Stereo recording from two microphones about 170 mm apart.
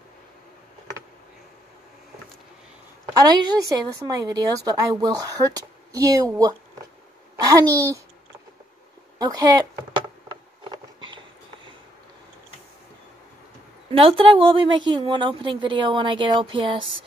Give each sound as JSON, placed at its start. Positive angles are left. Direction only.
{"t": 3.3, "sound": "a woman's voice", "side_deg": -25}
{"t": 9.2, "sound": "speech", "side_deg": -20}
{"t": 10.6, "sound": "a sound", "side_deg": -30}
{"t": 13.9, "sound": "a woman's voice", "side_deg": -30}